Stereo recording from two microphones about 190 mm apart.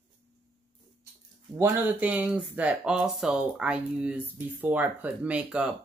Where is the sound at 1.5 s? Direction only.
10° right (ahead or behind).